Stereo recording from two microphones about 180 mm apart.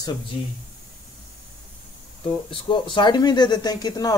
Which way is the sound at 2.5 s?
25° left (ahead or behind).